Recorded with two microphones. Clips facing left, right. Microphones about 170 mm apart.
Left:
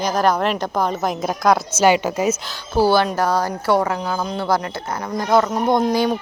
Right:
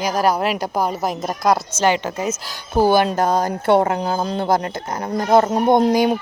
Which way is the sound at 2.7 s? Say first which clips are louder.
Right 1 dB; 15° right (ahead or behind).